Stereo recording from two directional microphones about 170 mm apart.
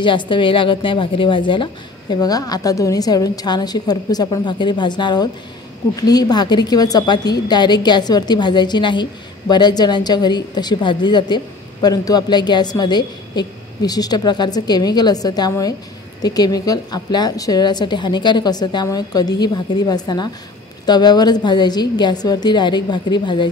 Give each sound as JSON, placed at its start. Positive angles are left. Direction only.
{"t": 0.0, "sound": "a woman's voice", "side_deg": 30}